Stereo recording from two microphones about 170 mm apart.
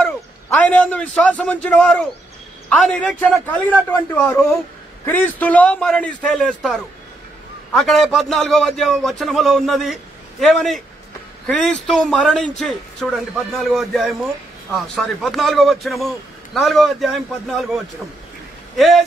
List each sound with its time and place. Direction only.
0.0 s a man's voice: 10° left (ahead or behind)
18.8 s a man's voice: centre (ahead or behind)